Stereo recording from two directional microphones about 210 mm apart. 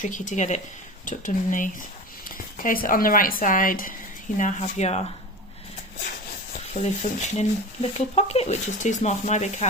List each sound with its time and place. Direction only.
0.0 s speech: 35° left (ahead or behind)
6.7 s speech: 30° left (ahead or behind)